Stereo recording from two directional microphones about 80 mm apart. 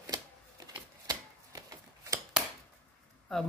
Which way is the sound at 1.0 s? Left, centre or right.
Right.